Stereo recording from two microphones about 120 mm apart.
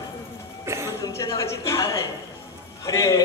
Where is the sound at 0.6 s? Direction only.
20° right (ahead or behind).